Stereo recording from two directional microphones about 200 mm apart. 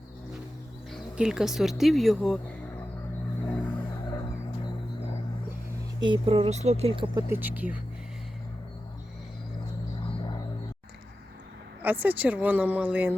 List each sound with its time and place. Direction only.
0.9 s speech: centre (ahead or behind)
3.5 s vehicle: 5° left (ahead or behind)
6.0 s speech: 25° right (ahead or behind)
7.3 s speech: 10° right (ahead or behind)
11.8 s speech: 10° right (ahead or behind)